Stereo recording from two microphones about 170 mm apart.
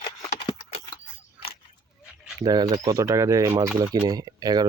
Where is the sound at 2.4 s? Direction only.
20° right (ahead or behind).